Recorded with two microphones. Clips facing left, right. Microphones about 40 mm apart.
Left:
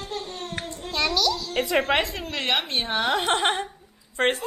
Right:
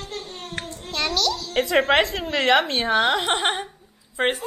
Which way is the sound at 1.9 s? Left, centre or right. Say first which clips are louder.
Right 5 dB; right.